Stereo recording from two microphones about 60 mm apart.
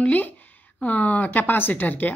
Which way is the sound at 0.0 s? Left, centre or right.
Left.